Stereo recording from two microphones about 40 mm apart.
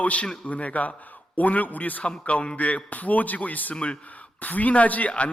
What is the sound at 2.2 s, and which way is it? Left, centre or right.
Speech, left.